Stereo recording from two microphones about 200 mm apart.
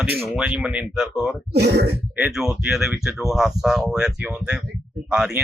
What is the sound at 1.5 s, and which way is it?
Speech, 55° right (ahead or behind).